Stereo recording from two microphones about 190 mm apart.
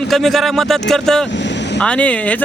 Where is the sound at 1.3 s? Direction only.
70° left (ahead or behind).